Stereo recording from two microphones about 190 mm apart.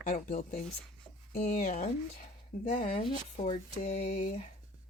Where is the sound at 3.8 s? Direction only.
45° left (ahead or behind).